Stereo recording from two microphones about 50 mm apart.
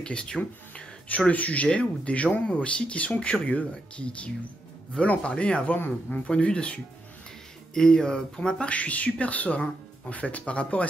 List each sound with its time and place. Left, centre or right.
0.0 s speech: centre
0.4 s speech: left